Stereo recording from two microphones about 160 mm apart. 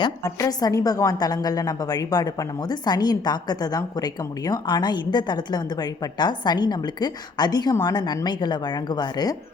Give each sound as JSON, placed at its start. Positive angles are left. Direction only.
{"t": 0.0, "sound": "a woman's voice", "side_deg": 20}